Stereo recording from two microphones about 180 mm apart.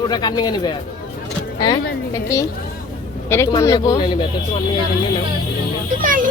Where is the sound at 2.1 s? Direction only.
20° left (ahead or behind).